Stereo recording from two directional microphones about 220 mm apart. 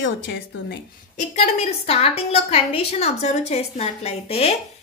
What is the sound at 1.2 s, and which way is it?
A woman's voice, 30° left (ahead or behind).